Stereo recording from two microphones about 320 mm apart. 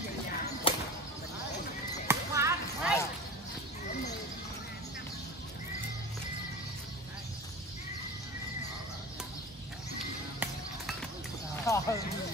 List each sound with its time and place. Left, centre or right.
0.7 s a sound: centre
2.0 s basketball bounce: centre
10.4 s music: centre